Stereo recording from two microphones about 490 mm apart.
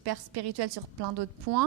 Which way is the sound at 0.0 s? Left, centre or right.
Right.